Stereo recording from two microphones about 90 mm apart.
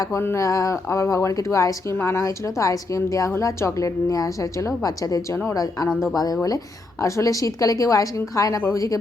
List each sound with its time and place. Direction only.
0.0 s speech: 30° left (ahead or behind)
7.0 s speech: 35° left (ahead or behind)